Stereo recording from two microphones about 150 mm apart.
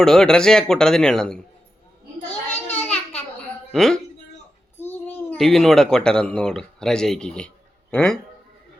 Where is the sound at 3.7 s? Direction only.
5° left (ahead or behind).